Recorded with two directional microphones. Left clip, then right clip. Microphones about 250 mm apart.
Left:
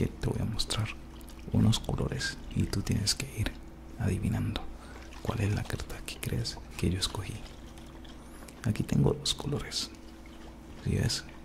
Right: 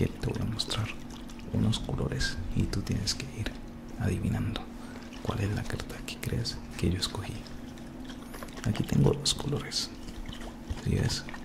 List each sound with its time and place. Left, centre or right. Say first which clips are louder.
0.0 s a sound: right 1 dB; centre
1.6 s speech: left 1 dB; centre
8.6 s speech: right 2 dB; centre
10.9 s speech: even; centre